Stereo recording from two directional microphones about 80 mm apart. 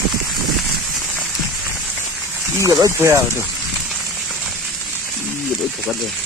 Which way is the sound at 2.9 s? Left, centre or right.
Right.